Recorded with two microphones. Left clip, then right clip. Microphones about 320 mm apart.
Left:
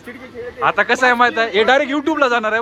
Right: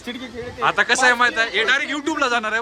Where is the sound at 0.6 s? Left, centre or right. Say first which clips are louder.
Left 2 dB; centre.